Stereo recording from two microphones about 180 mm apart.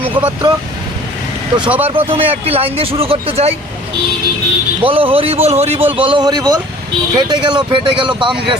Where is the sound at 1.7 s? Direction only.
10° right (ahead or behind).